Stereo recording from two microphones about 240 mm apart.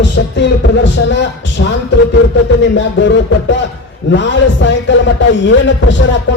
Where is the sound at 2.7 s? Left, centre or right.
Left.